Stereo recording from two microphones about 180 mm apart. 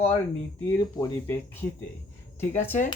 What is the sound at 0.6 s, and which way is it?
Speech, 15° left (ahead or behind).